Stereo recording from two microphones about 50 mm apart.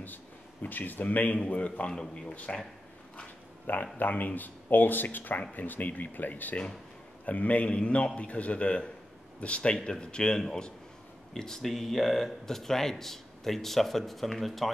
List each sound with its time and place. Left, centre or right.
0.0 s a man's voice: left
1.9 s speech: centre
3.7 s a man's voice: left; by 14.7 s centre